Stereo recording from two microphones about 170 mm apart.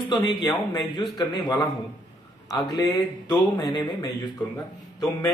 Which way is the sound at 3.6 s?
25° left (ahead or behind).